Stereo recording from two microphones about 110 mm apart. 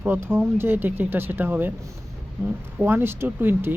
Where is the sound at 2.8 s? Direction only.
20° right (ahead or behind).